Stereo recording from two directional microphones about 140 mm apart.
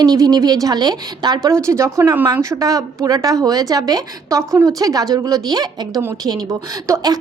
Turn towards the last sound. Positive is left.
turn(degrees=-25)  # may be behind; listen again after turning